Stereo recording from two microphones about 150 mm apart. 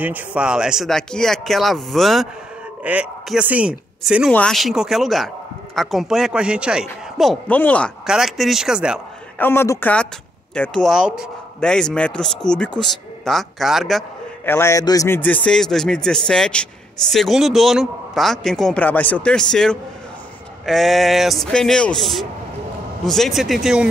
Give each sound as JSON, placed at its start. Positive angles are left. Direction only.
{"t": 0.0, "sound": "a man's voice", "side_deg": -10}
{"t": 4.3, "sound": "a man's voice", "side_deg": 5}
{"t": 7.4, "sound": "a man's voice", "side_deg": 10}
{"t": 8.1, "sound": "a man's voice", "side_deg": 0}
{"t": 9.4, "sound": "a man's voice", "side_deg": 15}
{"t": 14.4, "sound": "a man's voice", "side_deg": 15}